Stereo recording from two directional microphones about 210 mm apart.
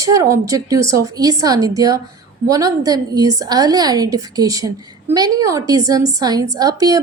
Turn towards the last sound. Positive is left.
turn(degrees=-15)  # may be behind; listen again after turning